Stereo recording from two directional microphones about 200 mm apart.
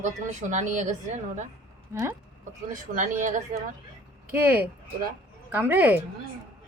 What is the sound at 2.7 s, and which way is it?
Speech, 40° right (ahead or behind).